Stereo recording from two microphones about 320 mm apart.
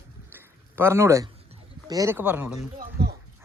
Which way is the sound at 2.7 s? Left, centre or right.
Right.